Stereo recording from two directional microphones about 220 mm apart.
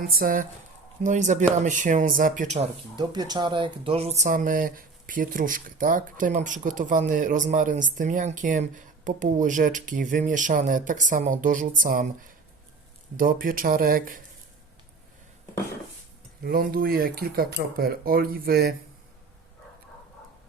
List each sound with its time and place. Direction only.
0.0 s speech: 40° right (ahead or behind)
2.9 s speech: 20° right (ahead or behind); by 12.0 s 35° right (ahead or behind)
13.1 s speech: 40° right (ahead or behind)
16.4 s speech: 45° right (ahead or behind)